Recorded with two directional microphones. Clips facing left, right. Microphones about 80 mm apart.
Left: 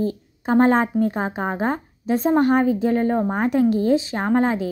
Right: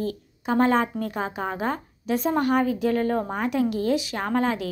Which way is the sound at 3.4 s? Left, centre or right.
Left.